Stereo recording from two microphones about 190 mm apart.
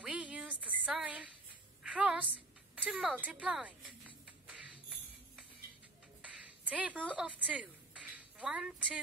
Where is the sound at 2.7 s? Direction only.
5° right (ahead or behind).